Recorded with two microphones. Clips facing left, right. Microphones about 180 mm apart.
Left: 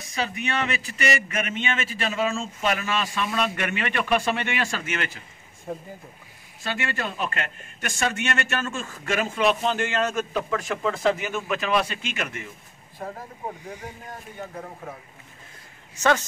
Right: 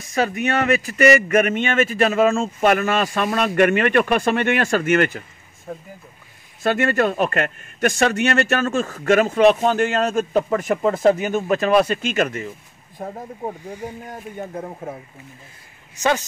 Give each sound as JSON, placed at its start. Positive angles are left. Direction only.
{"t": 0.1, "sound": "speech", "side_deg": -50}
{"t": 6.6, "sound": "a man's voice", "side_deg": -45}
{"t": 14.4, "sound": "a man's voice", "side_deg": -35}